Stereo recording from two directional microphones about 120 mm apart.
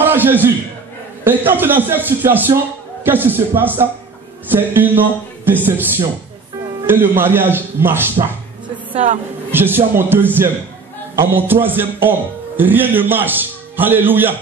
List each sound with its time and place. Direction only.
0.0 s a sound: 15° right (ahead or behind)
1.2 s a man's voice: 15° right (ahead or behind)
9.5 s a man's voice: 20° right (ahead or behind)